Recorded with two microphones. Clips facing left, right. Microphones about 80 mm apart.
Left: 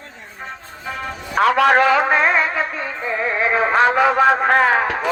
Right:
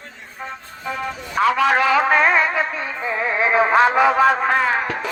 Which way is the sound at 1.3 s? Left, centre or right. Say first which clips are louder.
Left 3 dB; left.